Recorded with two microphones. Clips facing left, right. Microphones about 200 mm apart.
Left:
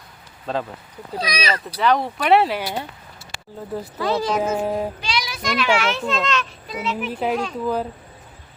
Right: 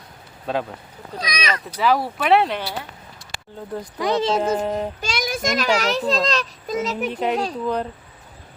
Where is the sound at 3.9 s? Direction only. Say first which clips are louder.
Right 2 dB; 15° right (ahead or behind).